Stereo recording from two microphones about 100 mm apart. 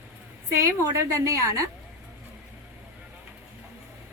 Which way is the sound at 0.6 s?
30° right (ahead or behind).